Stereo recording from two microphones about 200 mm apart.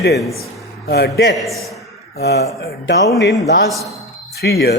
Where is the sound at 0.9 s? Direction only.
50° left (ahead or behind).